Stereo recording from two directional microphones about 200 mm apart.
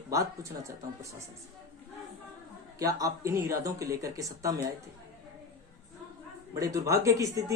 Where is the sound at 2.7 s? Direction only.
15° right (ahead or behind).